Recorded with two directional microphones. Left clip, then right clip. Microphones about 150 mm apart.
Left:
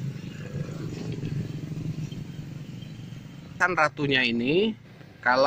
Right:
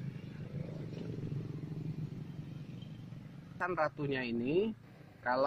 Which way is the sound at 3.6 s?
25° left (ahead or behind).